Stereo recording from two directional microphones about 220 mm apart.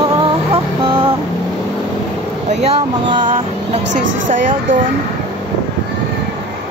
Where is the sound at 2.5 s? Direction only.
30° right (ahead or behind).